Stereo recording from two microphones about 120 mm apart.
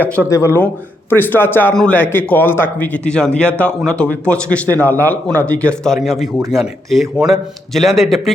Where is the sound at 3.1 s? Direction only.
10° left (ahead or behind).